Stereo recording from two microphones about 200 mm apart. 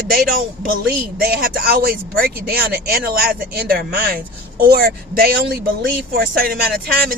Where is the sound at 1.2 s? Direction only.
50° right (ahead or behind).